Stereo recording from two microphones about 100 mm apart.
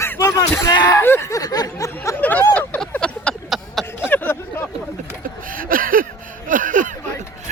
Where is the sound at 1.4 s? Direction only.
40° left (ahead or behind).